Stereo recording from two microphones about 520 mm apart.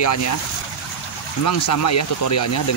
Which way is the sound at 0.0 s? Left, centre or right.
Left.